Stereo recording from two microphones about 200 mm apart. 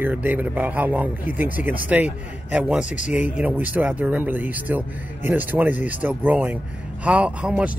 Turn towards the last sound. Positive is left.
turn(degrees=-5)  # may be behind; listen again after turning